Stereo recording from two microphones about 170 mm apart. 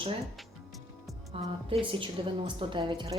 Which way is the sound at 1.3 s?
30° right (ahead or behind).